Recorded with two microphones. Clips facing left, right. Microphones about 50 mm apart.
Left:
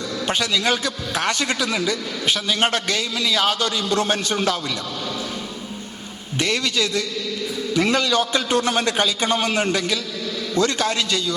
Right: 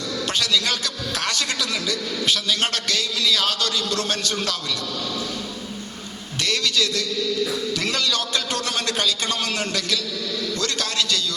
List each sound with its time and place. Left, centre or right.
0.3 s a man's voice: left
6.4 s a man's voice: left